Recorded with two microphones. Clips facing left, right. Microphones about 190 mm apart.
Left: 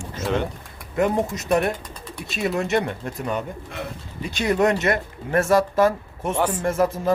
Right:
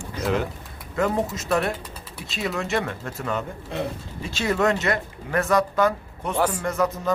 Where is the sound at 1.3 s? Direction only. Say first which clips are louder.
Left 3 dB; 20° left (ahead or behind).